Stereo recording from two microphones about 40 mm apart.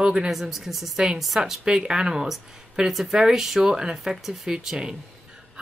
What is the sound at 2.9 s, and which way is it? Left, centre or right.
A woman's voice, centre.